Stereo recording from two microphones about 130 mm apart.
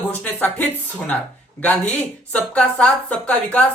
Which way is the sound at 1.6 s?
10° left (ahead or behind).